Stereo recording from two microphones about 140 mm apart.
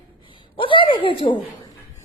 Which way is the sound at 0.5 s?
35° left (ahead or behind).